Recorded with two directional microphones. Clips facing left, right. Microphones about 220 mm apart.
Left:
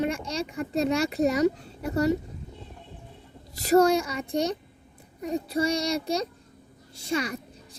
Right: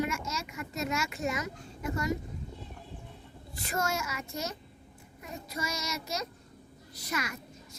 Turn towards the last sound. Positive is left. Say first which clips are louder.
# left 8 dB
turn(degrees=30)  # may be behind; listen again after turning